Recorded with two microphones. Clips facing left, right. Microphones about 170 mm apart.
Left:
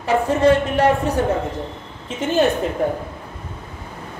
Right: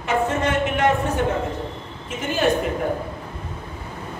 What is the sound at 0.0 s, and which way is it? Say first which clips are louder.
Speech: left 5 dB; 35° left (ahead or behind).